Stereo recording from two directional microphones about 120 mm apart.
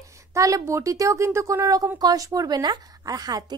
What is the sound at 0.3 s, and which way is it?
A woman's voice, 25° right (ahead or behind).